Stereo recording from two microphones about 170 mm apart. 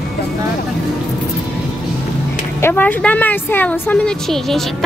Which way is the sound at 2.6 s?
10° left (ahead or behind).